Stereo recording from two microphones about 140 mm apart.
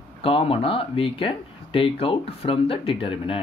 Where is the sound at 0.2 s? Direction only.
40° left (ahead or behind).